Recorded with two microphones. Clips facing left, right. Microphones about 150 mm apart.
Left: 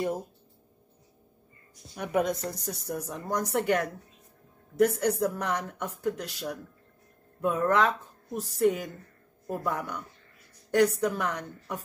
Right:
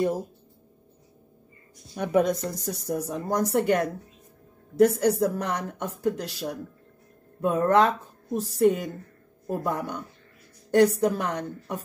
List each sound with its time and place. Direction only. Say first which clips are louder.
2.0 s a woman's voice: right 5 dB; 35° right (ahead or behind)
2.6 s a woman's voice: right 5 dB; 45° right (ahead or behind); by 11.8 s 30° right (ahead or behind)